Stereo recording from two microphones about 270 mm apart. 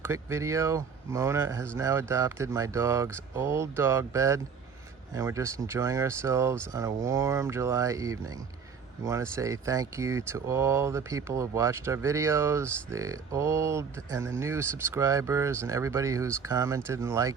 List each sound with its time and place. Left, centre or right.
0.0 s speech: centre